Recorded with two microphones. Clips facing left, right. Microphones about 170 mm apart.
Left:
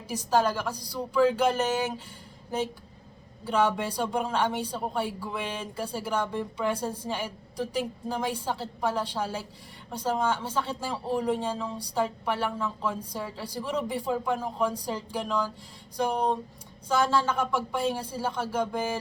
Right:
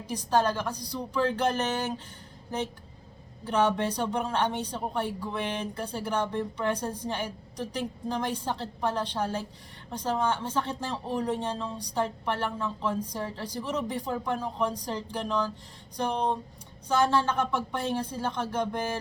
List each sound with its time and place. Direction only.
0.1 s speech: 10° left (ahead or behind)
3.9 s speech: 10° left (ahead or behind)